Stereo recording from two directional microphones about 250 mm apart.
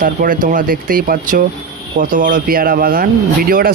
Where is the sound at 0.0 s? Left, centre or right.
Right.